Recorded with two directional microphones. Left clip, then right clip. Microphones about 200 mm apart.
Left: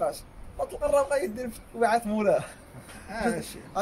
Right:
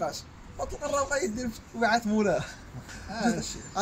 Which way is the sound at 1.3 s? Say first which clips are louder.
Left 1 dB; 30° left (ahead or behind).